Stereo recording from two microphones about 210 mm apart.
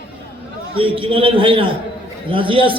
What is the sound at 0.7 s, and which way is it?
A man's voice, 25° right (ahead or behind).